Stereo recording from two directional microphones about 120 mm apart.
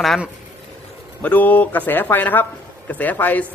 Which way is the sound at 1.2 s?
15° left (ahead or behind).